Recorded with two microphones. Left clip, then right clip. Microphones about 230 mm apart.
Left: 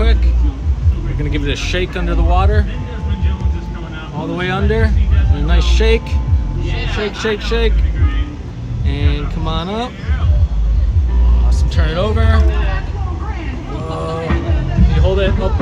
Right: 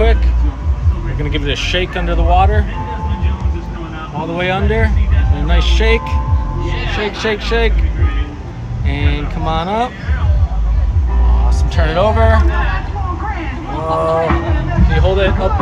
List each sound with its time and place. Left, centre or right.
1.3 s speech: centre
4.4 s speech: centre
6.6 s speech: centre
7.2 s speech: centre
8.8 s a sound: centre
11.7 s speech: centre
13.8 s speech: centre